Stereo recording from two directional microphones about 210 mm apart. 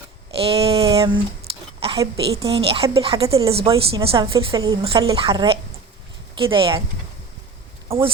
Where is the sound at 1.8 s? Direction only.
25° right (ahead or behind).